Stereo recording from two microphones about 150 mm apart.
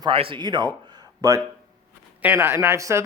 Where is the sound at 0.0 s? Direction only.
35° right (ahead or behind).